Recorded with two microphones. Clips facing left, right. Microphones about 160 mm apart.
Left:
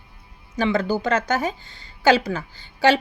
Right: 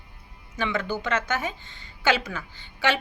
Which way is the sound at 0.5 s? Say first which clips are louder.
Left 7 dB; 35° left (ahead or behind).